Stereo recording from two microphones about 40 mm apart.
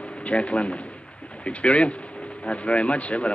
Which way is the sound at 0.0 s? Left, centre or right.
Left.